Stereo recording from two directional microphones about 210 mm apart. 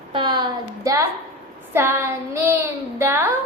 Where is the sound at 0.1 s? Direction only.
20° right (ahead or behind).